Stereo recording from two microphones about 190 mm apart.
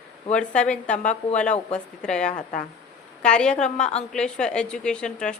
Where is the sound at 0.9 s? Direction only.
40° left (ahead or behind).